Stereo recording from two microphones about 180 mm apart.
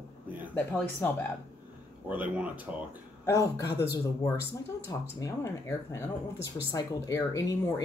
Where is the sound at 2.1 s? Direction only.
10° right (ahead or behind).